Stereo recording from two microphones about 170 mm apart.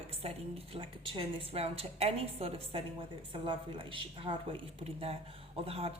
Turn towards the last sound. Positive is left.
turn(degrees=-35)  # may be behind; listen again after turning